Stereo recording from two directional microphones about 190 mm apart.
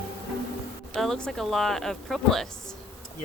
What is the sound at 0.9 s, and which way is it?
Speech, 5° left (ahead or behind).